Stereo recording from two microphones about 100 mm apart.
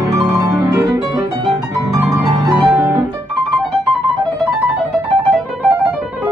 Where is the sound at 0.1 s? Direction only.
35° right (ahead or behind).